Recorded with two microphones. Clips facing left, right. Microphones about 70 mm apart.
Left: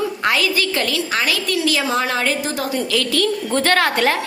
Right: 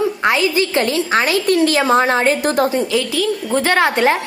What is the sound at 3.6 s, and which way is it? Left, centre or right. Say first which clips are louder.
Speech: right 2 dB; centre.